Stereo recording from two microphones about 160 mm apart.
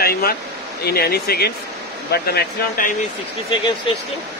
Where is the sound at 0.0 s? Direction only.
70° left (ahead or behind).